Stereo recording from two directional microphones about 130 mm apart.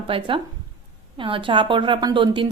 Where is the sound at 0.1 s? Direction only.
40° right (ahead or behind).